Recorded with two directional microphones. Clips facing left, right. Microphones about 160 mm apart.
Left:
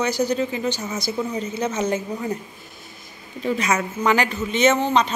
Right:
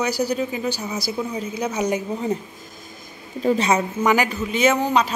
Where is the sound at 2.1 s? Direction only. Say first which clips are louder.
Right 3 dB; 25° right (ahead or behind).